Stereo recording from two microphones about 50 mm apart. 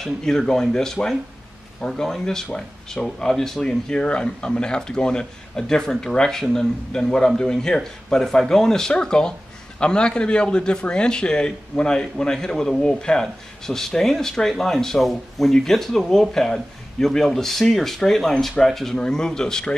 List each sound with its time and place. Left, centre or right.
0.0 s speech: centre